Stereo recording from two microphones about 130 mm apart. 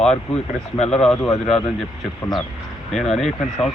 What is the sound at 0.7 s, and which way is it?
Speech, 50° left (ahead or behind).